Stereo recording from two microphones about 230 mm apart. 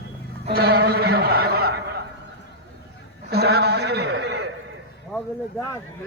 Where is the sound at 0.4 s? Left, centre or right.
Right.